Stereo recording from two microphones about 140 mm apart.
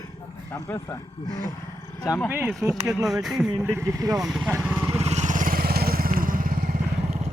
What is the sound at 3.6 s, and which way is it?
Speech, 20° right (ahead or behind).